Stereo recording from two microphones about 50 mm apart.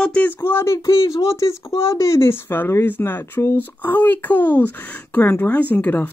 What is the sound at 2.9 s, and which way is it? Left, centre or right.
Speech, left.